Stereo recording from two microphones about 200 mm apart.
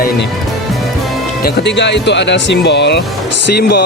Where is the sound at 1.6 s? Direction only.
60° left (ahead or behind).